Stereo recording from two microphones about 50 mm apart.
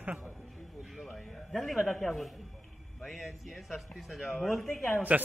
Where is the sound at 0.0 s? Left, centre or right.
Right.